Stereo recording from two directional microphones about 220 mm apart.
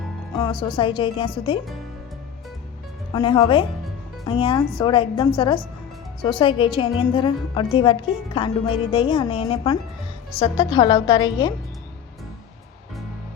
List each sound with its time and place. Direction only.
0.3 s a woman's voice: 20° left (ahead or behind)
3.1 s a woman's voice: 20° left (ahead or behind)